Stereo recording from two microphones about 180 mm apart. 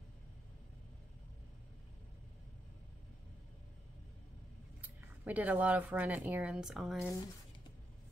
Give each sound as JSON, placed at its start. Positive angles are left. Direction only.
{"t": 4.8, "sound": "speech", "side_deg": -10}